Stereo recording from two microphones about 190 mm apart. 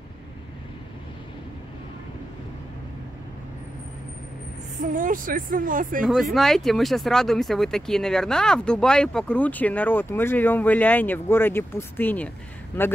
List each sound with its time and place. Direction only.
4.9 s speech: 45° right (ahead or behind)
6.0 s speech: centre (ahead or behind)